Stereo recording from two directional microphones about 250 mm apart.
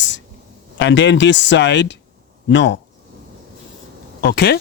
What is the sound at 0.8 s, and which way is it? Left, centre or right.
Speech, left.